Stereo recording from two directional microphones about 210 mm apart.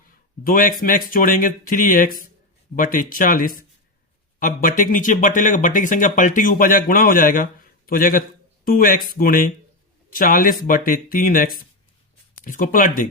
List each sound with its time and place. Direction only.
0.0 s speech: 40° left (ahead or behind)